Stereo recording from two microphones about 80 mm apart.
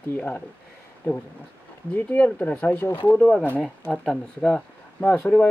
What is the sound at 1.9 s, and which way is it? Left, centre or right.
Speech, left.